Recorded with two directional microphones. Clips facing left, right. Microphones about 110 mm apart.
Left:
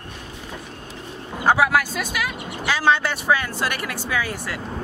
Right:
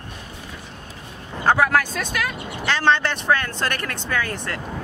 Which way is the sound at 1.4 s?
10° left (ahead or behind).